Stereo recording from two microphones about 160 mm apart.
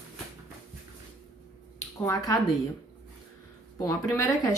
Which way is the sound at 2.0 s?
20° left (ahead or behind).